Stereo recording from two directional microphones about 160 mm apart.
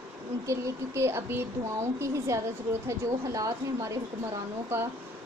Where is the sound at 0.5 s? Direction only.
15° right (ahead or behind).